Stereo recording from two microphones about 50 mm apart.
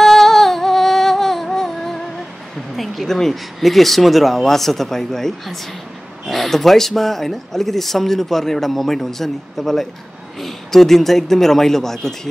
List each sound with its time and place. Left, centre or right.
0.0 s music: centre
2.7 s speech: centre